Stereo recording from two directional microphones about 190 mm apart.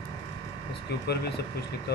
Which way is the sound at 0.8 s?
60° left (ahead or behind).